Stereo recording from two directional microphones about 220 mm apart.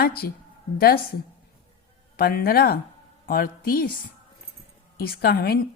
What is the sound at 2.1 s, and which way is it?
A woman's voice, 45° left (ahead or behind).